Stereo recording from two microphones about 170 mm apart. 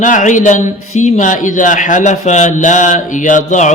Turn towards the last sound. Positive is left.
turn(degrees=45)  # may be behind; listen again after turning